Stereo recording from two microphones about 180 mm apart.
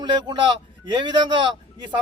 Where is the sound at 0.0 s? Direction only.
25° right (ahead or behind).